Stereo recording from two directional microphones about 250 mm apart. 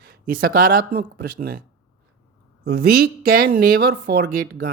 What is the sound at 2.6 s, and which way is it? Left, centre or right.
Speech, right.